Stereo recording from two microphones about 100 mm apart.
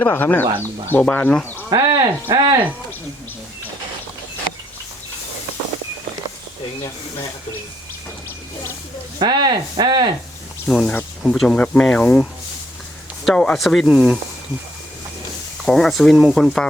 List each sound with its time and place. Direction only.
0.0 s speech: 20° left (ahead or behind)
1.7 s speech: 40° right (ahead or behind)
9.2 s speech: 50° right (ahead or behind)
10.7 s speech: centre (ahead or behind)
13.2 s speech: 10° left (ahead or behind)
15.6 s speech: 5° left (ahead or behind)